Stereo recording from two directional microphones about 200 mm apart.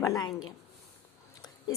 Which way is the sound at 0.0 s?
15° left (ahead or behind).